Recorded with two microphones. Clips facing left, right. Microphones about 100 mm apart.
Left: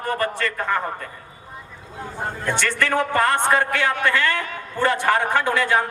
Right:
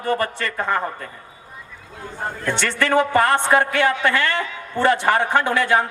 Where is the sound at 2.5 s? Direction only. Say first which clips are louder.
Right 3 dB; 20° right (ahead or behind).